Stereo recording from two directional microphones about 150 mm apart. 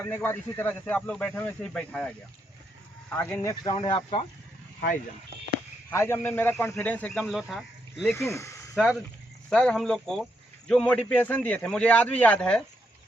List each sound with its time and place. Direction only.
0.0 s speech: 15° left (ahead or behind)
3.5 s speech: 25° left (ahead or behind)
5.9 s speech: 15° left (ahead or behind)
7.2 s speech: centre (ahead or behind)
7.9 s speech: 15° left (ahead or behind)
8.7 s speech: centre (ahead or behind)